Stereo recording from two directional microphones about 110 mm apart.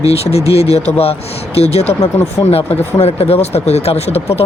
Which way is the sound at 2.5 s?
65° left (ahead or behind).